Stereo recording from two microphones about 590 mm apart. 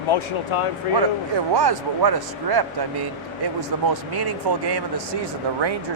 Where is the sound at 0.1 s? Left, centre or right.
Left.